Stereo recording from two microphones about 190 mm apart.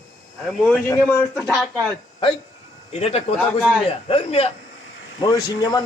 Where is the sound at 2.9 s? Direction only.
35° left (ahead or behind).